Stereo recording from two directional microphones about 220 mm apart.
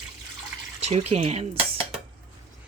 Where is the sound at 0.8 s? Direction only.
30° right (ahead or behind).